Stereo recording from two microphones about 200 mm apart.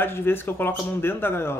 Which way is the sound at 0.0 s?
10° left (ahead or behind).